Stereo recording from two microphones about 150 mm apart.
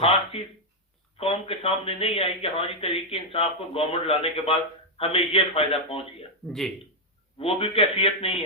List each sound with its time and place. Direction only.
0.0 s speech: 40° left (ahead or behind)
6.5 s speech: centre (ahead or behind)
7.3 s speech: 40° left (ahead or behind)